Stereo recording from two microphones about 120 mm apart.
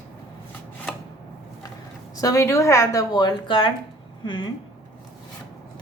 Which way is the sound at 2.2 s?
25° left (ahead or behind).